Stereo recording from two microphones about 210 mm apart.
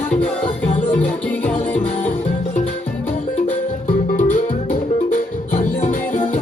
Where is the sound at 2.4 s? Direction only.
35° left (ahead or behind).